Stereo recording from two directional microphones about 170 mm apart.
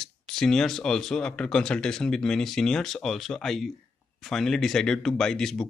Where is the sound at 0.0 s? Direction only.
5° left (ahead or behind).